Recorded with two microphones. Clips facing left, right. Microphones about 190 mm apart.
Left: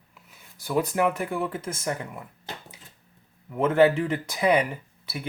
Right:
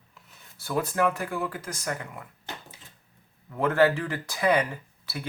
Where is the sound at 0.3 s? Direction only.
10° left (ahead or behind).